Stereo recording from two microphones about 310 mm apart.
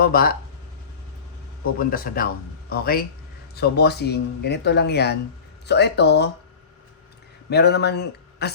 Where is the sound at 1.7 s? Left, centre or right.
Left.